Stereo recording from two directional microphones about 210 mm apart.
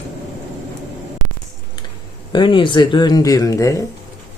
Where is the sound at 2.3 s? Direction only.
25° left (ahead or behind).